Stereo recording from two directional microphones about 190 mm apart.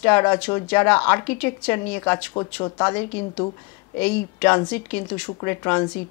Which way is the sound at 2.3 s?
25° left (ahead or behind).